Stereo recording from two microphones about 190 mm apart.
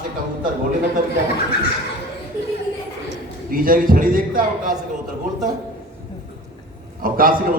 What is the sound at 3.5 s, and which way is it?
Speech, 50° right (ahead or behind).